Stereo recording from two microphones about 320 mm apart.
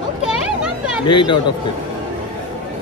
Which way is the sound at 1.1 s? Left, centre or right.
Centre.